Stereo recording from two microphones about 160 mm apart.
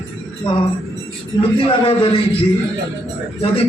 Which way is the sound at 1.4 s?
35° left (ahead or behind).